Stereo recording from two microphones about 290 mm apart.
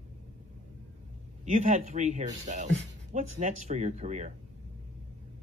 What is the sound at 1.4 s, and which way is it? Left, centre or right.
Speech, right.